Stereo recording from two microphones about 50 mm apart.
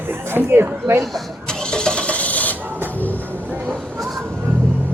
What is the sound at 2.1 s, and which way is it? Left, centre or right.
Filing, left.